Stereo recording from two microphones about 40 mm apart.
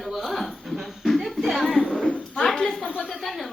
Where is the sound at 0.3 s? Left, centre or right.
Centre.